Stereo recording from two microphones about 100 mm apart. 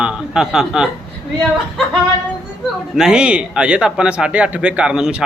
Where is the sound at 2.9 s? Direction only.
10° right (ahead or behind).